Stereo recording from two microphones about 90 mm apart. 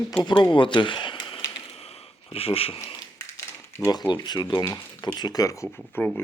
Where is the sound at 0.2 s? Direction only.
55° left (ahead or behind).